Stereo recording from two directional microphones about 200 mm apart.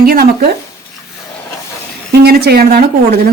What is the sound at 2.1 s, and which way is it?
Speech, 50° right (ahead or behind).